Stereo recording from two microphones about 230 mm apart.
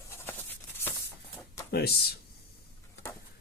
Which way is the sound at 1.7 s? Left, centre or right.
Left.